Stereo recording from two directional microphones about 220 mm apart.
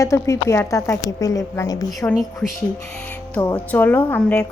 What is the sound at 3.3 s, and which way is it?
A woman's voice, 5° left (ahead or behind).